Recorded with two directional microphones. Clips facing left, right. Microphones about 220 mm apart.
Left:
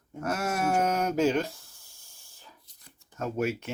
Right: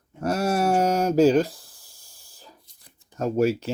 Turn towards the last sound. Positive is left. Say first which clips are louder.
# right 8 dB
turn(degrees=-35)  # may be behind; listen again after turning